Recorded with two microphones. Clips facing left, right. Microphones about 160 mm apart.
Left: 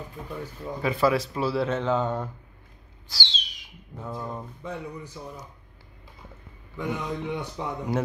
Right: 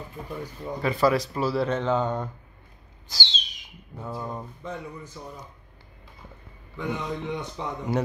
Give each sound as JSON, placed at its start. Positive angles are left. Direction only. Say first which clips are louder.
{"t": 0.7, "sound": "speech", "louder": "right 1 dB", "side_deg": 5}
{"t": 3.1, "sound": "a sound", "louder": "right 1 dB", "side_deg": -20}
{"t": 3.9, "sound": "speech", "louder": "right 1 dB", "side_deg": -5}
{"t": 4.6, "sound": "speech", "louder": "left 2 dB", "side_deg": 10}
{"t": 6.8, "sound": "speech", "louder": "even", "side_deg": 5}